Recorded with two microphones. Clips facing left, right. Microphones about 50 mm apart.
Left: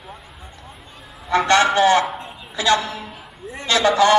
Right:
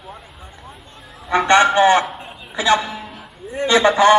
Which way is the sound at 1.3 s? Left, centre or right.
Centre.